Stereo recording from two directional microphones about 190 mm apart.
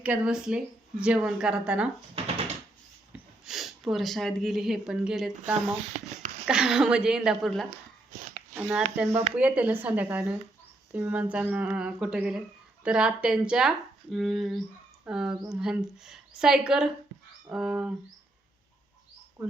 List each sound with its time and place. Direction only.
0.0 s speech: 5° right (ahead or behind)
3.1 s speech: centre (ahead or behind)
9.0 s speech: 35° right (ahead or behind)
9.3 s speech: 10° right (ahead or behind)